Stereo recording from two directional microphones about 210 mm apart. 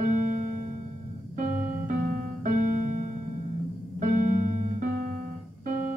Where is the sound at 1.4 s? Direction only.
40° right (ahead or behind).